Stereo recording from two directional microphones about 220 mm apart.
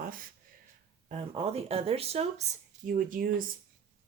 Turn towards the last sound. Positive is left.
turn(degrees=-40)  # may be behind; listen again after turning